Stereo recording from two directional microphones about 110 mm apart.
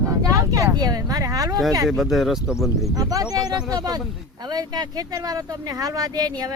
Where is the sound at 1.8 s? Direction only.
Centre (ahead or behind).